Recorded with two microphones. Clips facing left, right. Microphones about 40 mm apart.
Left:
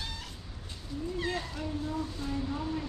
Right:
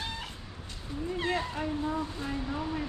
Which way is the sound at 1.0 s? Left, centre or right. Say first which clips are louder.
Right 3 dB; right.